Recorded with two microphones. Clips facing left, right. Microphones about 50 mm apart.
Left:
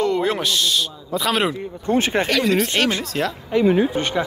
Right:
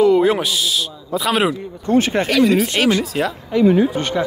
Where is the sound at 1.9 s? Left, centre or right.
Left.